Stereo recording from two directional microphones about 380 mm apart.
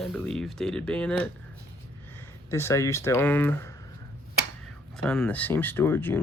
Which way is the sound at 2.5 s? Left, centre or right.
Centre.